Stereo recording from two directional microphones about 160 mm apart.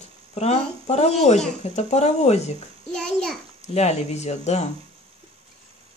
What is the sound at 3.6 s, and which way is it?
Speech, 45° left (ahead or behind).